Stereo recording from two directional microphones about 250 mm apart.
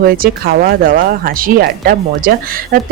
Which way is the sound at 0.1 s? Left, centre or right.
Right.